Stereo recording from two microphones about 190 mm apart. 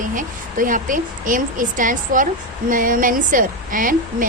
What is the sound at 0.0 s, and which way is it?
A woman's voice, 45° right (ahead or behind).